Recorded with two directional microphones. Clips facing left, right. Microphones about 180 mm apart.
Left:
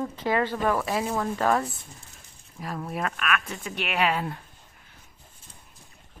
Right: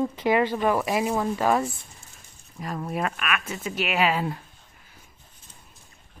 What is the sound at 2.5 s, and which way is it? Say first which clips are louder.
Speech: right 2 dB; centre (ahead or behind).